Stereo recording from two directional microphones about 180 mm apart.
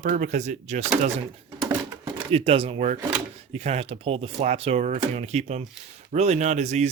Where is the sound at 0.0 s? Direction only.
45° right (ahead or behind).